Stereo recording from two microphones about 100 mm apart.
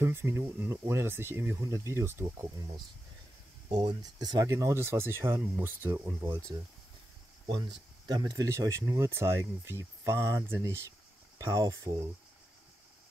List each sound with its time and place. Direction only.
0.0 s speech: 25° right (ahead or behind)
4.0 s speech: 40° right (ahead or behind); by 6.4 s 25° right (ahead or behind)
7.4 s speech: 50° right (ahead or behind); by 12.1 s 30° right (ahead or behind)